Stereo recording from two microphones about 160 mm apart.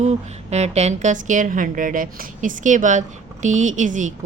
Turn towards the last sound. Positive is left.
turn(degrees=-50)  # may be behind; listen again after turning